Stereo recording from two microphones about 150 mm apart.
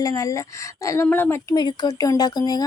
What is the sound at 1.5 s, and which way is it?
A woman's voice, 30° left (ahead or behind).